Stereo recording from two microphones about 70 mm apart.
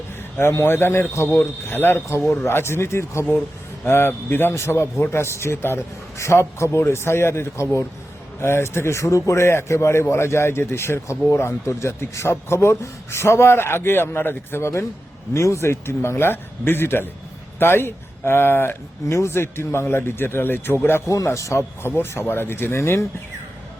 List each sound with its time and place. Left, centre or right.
0.3 s a man's voice: left
15.3 s a man's voice: left
19.0 s a man's voice: left
21.1 s a man's voice: left
21.8 s a man's voice: left